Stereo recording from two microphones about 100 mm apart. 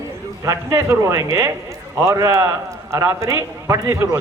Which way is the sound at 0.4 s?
30° right (ahead or behind).